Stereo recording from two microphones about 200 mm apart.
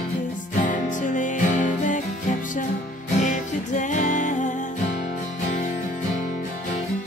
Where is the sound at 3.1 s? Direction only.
40° left (ahead or behind).